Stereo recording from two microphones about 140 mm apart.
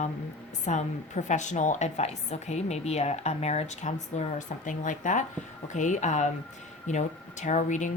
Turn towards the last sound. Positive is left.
turn(degrees=60)  # may be behind; listen again after turning